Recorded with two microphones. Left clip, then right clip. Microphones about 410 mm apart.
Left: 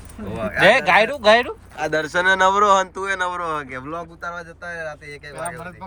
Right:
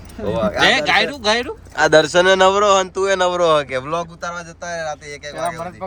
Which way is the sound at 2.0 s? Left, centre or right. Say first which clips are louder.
Right 4 dB; centre.